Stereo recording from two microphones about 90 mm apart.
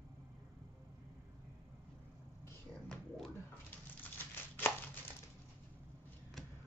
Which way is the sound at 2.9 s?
5° left (ahead or behind).